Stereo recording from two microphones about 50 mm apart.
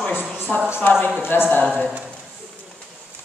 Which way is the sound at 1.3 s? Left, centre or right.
Left.